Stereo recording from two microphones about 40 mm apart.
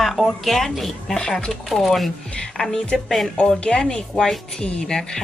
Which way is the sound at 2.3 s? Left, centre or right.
Centre.